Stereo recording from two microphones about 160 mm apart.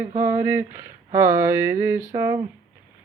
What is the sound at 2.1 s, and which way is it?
Speech, 20° right (ahead or behind).